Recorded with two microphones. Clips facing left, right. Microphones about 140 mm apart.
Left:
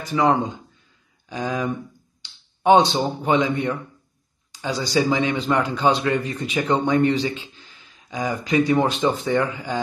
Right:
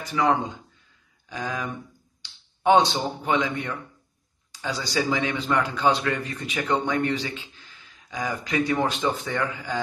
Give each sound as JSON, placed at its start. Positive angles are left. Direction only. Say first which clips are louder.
{"t": 0.1, "sound": "speech", "louder": "left 4 dB", "side_deg": 25}